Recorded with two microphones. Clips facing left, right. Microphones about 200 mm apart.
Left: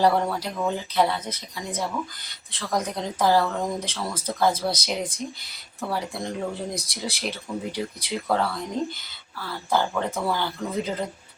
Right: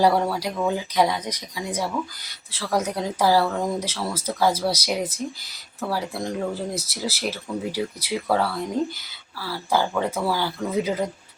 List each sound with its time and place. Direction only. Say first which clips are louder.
0.0 s speech: right 2 dB; 10° right (ahead or behind)